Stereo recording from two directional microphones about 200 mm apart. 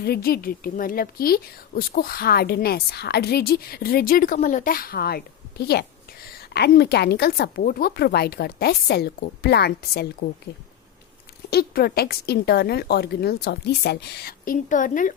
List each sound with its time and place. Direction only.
0.0 s a woman's voice: 50° left (ahead or behind)
11.5 s a woman's voice: 50° left (ahead or behind)